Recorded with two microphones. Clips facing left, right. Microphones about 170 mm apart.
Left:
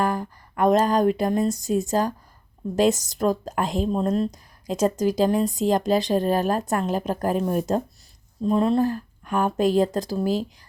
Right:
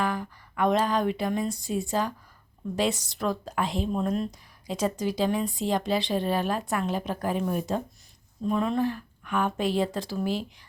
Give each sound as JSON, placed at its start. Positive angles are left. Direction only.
{"t": 0.0, "sound": "a woman's voice", "side_deg": 45}